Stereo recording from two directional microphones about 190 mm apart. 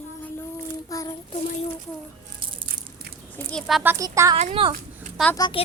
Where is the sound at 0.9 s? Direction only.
20° left (ahead or behind).